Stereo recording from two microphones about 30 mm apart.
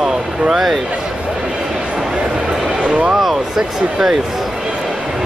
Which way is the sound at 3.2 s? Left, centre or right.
Centre.